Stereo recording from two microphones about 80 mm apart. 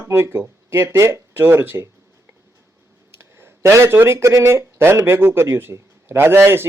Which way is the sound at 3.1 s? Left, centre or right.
Right.